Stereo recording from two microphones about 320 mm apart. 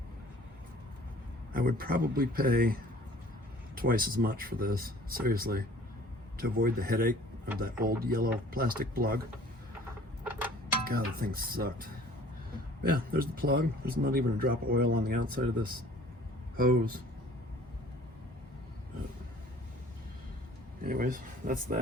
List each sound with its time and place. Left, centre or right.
1.5 s speech: right
3.8 s speech: right
10.8 s speech: right
20.8 s speech: right